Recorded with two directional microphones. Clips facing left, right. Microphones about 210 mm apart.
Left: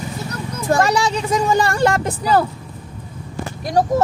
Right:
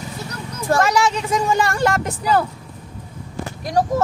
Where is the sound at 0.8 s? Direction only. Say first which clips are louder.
Even; 35° left (ahead or behind).